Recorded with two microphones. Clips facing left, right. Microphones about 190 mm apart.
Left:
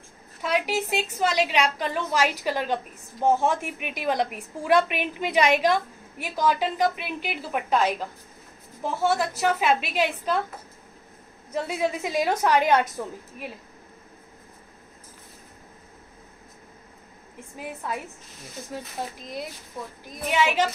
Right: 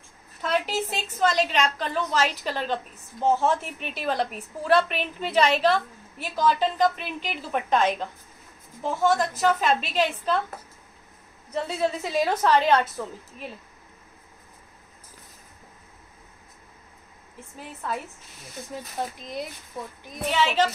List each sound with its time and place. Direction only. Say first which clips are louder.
0.4 s a woman's voice: left 1 dB; 10° left (ahead or behind)
9.0 s a woman's voice: right 2 dB; 10° left (ahead or behind)
11.5 s a woman's voice: even; 15° left (ahead or behind)
17.6 s a woman's voice: left 1 dB; 10° left (ahead or behind)
20.2 s a woman's voice: even; 10° left (ahead or behind)